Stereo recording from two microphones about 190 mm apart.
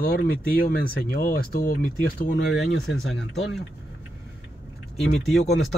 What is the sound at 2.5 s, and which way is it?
Speech, centre (ahead or behind).